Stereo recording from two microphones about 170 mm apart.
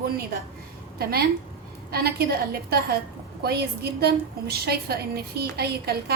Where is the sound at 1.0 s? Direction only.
65° right (ahead or behind).